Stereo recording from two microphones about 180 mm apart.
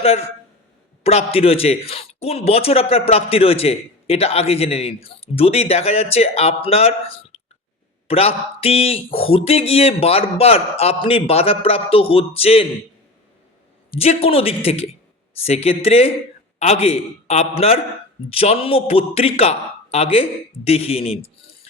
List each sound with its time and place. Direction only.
0.0 s a man's voice: 35° left (ahead or behind)
14.0 s a man's voice: 35° left (ahead or behind)